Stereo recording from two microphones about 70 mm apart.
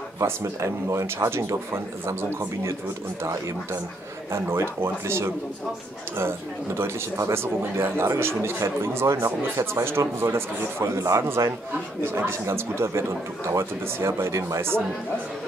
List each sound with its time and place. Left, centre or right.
0.2 s speech: right
4.3 s speech: right